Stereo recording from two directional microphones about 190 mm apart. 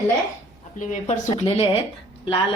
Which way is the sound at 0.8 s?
40° left (ahead or behind).